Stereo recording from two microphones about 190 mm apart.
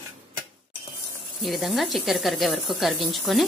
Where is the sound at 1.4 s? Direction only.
Centre (ahead or behind).